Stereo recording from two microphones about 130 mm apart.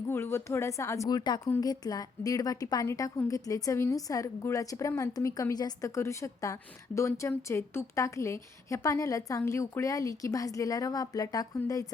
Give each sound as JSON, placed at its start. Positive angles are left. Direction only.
{"t": 0.1, "sound": "a woman's voice", "side_deg": 20}